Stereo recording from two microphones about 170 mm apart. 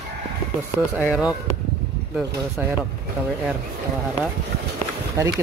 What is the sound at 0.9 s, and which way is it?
Speech, 5° right (ahead or behind).